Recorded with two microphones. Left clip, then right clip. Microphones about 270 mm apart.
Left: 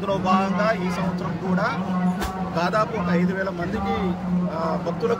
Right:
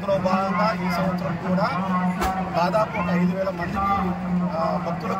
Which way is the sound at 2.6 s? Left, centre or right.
Centre.